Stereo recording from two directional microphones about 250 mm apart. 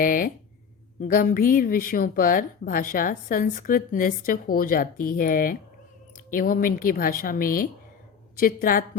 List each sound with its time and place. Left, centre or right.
0.0 s speech: left